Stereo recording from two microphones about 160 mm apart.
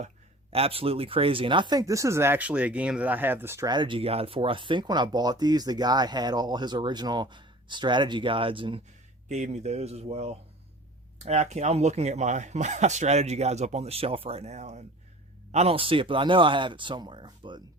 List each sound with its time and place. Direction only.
0.5 s speech: 35° right (ahead or behind)
9.3 s speech: 45° right (ahead or behind); by 17.6 s 30° right (ahead or behind)